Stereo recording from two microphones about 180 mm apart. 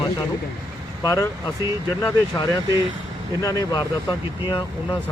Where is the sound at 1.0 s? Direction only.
20° left (ahead or behind).